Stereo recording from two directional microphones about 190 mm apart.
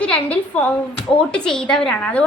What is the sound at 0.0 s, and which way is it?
A woman's voice, 5° left (ahead or behind).